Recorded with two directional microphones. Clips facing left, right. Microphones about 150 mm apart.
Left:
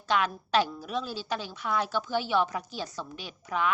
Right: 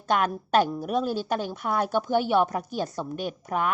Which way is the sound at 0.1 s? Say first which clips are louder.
Right 4 dB; 50° right (ahead or behind).